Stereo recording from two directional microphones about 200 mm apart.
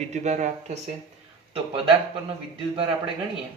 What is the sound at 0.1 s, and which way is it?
Speech, 35° right (ahead or behind).